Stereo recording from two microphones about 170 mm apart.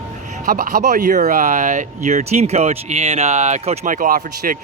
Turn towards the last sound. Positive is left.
turn(degrees=-55)  # may be behind; listen again after turning